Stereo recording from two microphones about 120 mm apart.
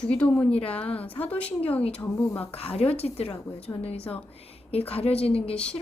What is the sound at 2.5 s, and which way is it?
A woman's voice, 55° left (ahead or behind).